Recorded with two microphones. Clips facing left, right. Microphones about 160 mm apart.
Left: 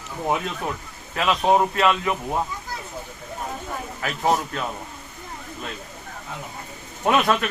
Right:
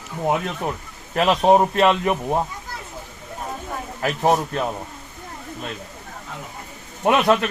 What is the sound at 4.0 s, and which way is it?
Speech, 35° right (ahead or behind).